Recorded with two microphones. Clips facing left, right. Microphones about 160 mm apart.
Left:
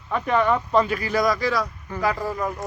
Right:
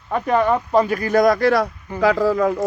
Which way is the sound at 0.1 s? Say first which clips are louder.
Right 3 dB; 40° right (ahead or behind).